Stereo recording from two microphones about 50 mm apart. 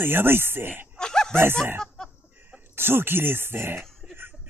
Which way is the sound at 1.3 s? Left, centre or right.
Right.